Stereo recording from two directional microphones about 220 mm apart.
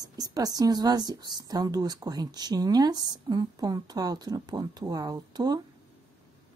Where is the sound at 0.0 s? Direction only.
15° right (ahead or behind).